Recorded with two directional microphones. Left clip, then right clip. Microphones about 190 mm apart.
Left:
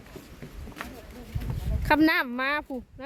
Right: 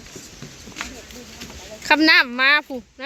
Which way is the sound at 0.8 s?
45° left (ahead or behind).